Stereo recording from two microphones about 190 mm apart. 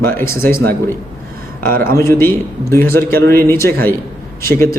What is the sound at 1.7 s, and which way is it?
Speech, 50° right (ahead or behind).